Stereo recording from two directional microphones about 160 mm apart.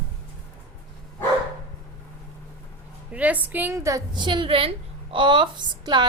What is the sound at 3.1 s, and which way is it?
A woman's voice, 10° right (ahead or behind).